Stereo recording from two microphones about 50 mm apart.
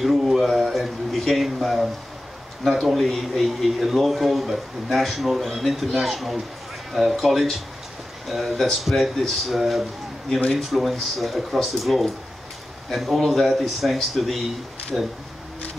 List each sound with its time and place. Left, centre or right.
0.0 s a sound: centre
2.8 s a man's voice: centre
14.9 s speech: centre